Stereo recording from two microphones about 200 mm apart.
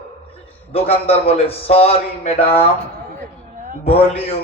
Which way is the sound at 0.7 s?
30° left (ahead or behind).